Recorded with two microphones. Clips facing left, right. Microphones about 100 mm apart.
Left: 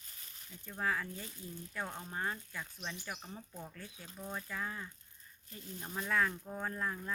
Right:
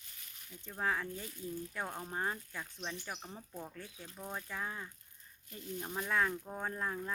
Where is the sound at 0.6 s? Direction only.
20° right (ahead or behind).